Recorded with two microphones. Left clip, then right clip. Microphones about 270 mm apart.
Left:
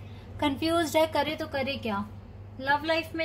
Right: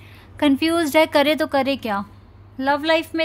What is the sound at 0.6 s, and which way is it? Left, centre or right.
A woman's voice, right.